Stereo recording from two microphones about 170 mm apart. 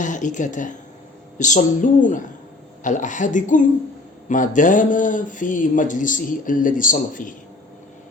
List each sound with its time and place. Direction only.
0.0 s speech: 45° left (ahead or behind)